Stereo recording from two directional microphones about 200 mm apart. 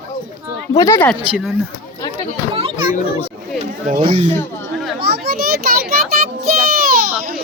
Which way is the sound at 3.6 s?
35° right (ahead or behind).